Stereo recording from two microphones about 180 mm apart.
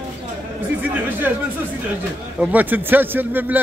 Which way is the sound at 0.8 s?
10° right (ahead or behind).